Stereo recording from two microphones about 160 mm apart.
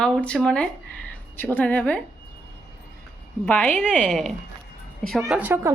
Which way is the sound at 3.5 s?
10° left (ahead or behind).